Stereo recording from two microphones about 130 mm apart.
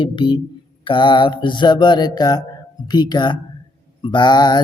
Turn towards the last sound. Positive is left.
turn(degrees=35)  # may be behind; listen again after turning